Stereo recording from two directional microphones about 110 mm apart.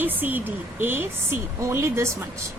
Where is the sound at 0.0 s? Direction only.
15° right (ahead or behind).